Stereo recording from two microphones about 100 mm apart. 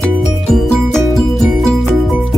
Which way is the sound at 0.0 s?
5° left (ahead or behind).